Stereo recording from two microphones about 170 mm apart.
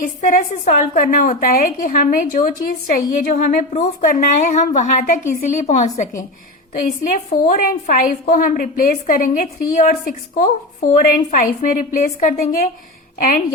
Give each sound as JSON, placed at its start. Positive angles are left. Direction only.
{"t": 0.0, "sound": "a woman's voice", "side_deg": 55}